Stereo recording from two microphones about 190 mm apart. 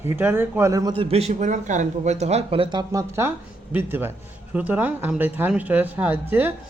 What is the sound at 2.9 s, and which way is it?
A man's voice, 15° right (ahead or behind).